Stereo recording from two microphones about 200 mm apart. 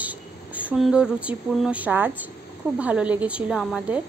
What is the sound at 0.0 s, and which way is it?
A woman's voice, 5° right (ahead or behind).